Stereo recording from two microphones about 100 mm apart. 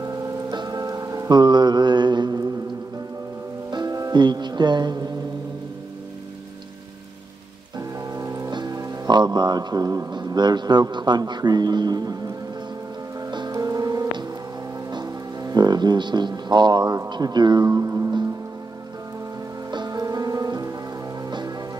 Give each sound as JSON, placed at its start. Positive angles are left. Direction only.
{"t": 0.5, "sound": "music", "side_deg": -45}
{"t": 3.7, "sound": "speech", "side_deg": -40}
{"t": 8.1, "sound": "rain on surface", "side_deg": -35}
{"t": 8.5, "sound": "a man's voice", "side_deg": -40}
{"t": 13.5, "sound": "music", "side_deg": -40}
{"t": 17.1, "sound": "speech", "side_deg": -45}
{"t": 19.7, "sound": "rain on surface", "side_deg": -45}
{"t": 21.3, "sound": "music", "side_deg": -50}